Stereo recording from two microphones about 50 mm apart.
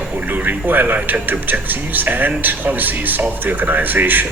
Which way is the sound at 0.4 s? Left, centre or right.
Right.